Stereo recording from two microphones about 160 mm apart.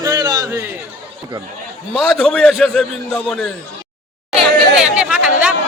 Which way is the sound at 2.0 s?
5° left (ahead or behind).